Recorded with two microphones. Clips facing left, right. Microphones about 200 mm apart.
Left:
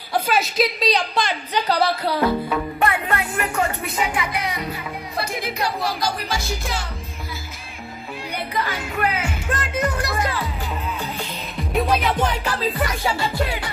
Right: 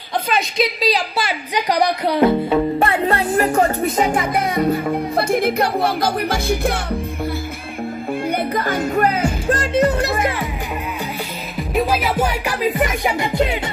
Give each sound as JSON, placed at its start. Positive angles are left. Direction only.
{"t": 0.3, "sound": "speech", "side_deg": 0}
{"t": 1.5, "sound": "music", "side_deg": -15}
{"t": 8.3, "sound": "music", "side_deg": -50}
{"t": 8.9, "sound": "music", "side_deg": -40}
{"t": 11.5, "sound": "music", "side_deg": 0}